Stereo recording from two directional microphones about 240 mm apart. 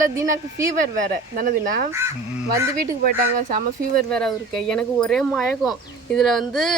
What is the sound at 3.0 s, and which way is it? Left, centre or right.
Speech, right.